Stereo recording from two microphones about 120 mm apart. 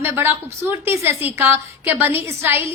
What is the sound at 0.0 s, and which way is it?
A woman's voice, 20° right (ahead or behind).